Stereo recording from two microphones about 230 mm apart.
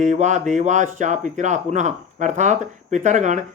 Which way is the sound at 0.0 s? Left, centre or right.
Right.